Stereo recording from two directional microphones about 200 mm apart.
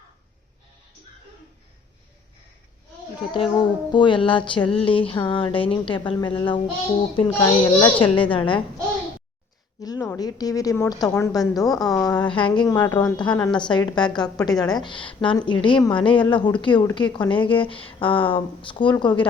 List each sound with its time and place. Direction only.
3.2 s a woman's voice: 25° left (ahead or behind)
9.8 s a woman's voice: 20° left (ahead or behind)